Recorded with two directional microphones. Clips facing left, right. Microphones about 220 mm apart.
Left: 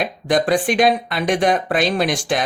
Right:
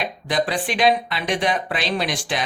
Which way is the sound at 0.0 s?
45° left (ahead or behind).